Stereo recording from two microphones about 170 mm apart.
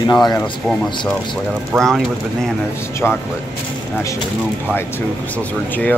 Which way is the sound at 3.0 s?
10° left (ahead or behind).